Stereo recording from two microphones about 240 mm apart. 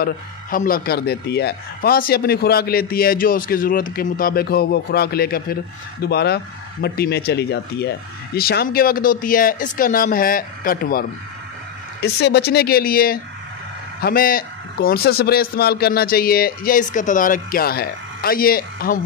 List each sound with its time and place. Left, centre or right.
0.0 s speech: left